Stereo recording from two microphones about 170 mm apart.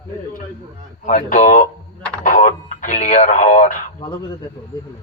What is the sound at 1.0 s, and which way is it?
A man's voice, 50° left (ahead or behind).